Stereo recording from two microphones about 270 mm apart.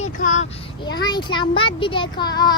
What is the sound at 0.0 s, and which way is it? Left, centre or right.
Child singing, left.